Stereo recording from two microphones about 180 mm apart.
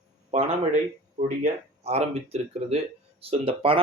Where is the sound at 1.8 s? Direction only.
35° right (ahead or behind).